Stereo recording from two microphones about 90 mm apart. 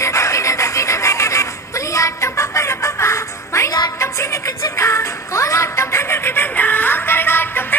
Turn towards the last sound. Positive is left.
turn(degrees=25)  # may be behind; listen again after turning